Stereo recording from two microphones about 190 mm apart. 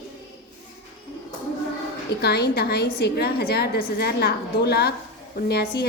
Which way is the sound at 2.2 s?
60° left (ahead or behind).